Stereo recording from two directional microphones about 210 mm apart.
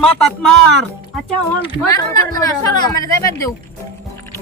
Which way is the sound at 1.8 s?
15° left (ahead or behind).